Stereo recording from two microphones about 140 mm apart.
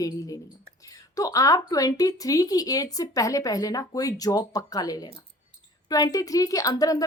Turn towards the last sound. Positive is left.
turn(degrees=25)  # may be behind; listen again after turning